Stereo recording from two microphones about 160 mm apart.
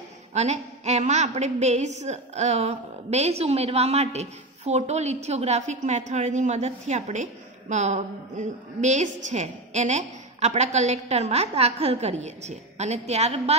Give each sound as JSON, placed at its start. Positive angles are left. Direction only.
{"t": 0.3, "sound": "a woman's voice", "side_deg": -45}